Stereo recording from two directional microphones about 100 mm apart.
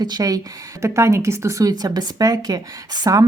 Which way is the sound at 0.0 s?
40° right (ahead or behind).